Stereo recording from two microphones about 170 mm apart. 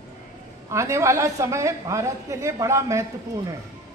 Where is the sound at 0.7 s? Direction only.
15° right (ahead or behind).